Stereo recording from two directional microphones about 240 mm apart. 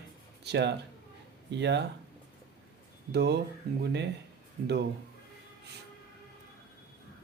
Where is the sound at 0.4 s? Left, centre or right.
Right.